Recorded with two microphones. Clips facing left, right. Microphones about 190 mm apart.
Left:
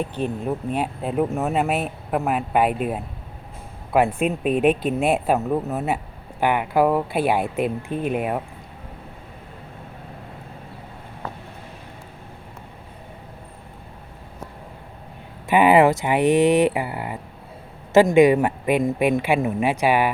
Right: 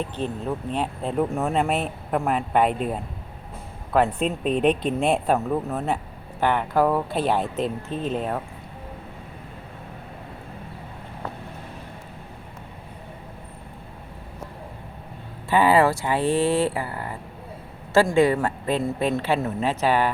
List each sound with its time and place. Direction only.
0.0 s speech: 15° left (ahead or behind)
15.4 s speech: 20° left (ahead or behind)